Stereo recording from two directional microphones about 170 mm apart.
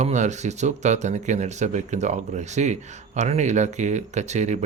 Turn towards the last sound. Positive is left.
turn(degrees=-45)  # may be behind; listen again after turning